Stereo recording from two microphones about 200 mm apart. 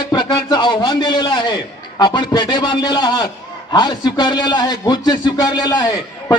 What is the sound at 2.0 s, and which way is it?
A man's voice, 20° left (ahead or behind).